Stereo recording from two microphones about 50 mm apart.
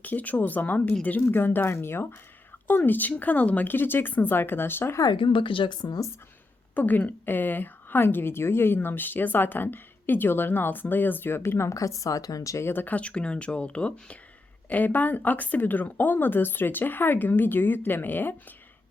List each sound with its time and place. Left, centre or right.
0.0 s speech: left
2.6 s speech: left
6.7 s speech: left
12.6 s speech: left
14.7 s speech: left